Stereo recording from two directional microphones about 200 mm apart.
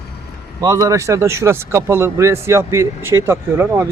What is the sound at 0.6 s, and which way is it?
Speech, 15° right (ahead or behind).